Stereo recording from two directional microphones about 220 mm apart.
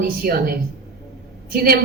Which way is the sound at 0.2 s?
45° right (ahead or behind).